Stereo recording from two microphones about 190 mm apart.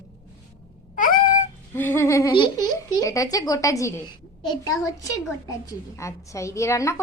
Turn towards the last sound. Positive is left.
turn(degrees=15)  # may be behind; listen again after turning